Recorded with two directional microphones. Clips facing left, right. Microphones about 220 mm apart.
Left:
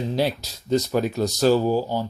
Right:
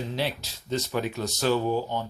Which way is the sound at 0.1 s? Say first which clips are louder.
Left 6 dB; 40° left (ahead or behind).